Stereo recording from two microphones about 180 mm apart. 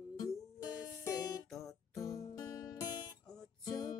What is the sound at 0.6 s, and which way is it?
Music, 20° left (ahead or behind).